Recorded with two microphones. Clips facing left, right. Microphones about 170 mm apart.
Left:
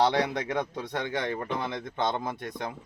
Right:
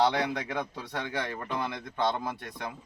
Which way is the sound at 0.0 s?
25° left (ahead or behind).